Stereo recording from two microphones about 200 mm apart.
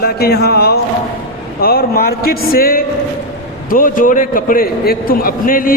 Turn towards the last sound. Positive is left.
turn(degrees=45)  # may be behind; listen again after turning